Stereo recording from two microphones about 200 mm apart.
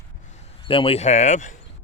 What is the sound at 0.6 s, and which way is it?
Speech, 25° left (ahead or behind).